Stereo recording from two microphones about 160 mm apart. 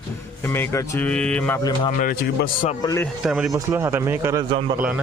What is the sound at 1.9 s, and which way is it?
Speech, 60° left (ahead or behind).